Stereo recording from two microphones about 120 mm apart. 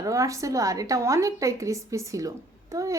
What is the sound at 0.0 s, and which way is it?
Speech, 25° right (ahead or behind).